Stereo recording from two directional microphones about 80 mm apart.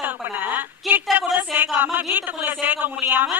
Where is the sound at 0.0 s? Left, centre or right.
Right.